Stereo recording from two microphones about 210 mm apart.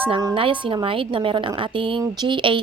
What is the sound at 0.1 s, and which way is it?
A woman's voice, 20° right (ahead or behind).